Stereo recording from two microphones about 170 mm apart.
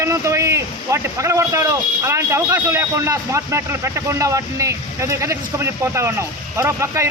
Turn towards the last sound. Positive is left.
turn(degrees=-15)  # may be behind; listen again after turning